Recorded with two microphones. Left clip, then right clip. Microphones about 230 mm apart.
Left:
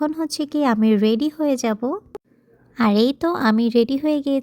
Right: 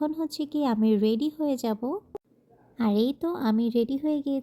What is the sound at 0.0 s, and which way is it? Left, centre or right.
Speech, left.